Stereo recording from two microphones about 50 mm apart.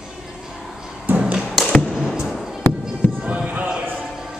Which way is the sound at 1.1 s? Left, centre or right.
Right.